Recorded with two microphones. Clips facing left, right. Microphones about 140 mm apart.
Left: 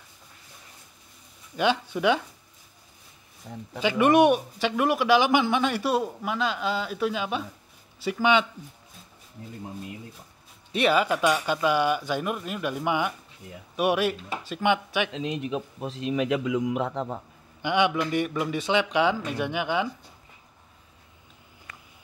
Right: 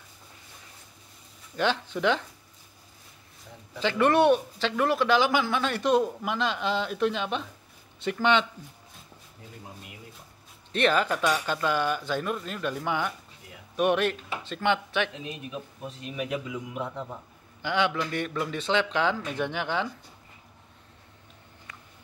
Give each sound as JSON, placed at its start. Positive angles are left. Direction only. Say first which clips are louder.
{"t": 1.6, "sound": "speech", "louder": "left 2 dB", "side_deg": 10}
{"t": 3.8, "sound": "speech", "louder": "left 2 dB", "side_deg": 15}
{"t": 10.7, "sound": "speech", "louder": "left 2 dB", "side_deg": 10}
{"t": 15.1, "sound": "speech", "louder": "left 8 dB", "side_deg": 90}
{"t": 17.6, "sound": "speech", "louder": "left 3 dB", "side_deg": 15}